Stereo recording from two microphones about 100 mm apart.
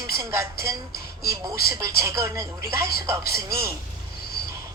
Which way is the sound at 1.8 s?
30° right (ahead or behind).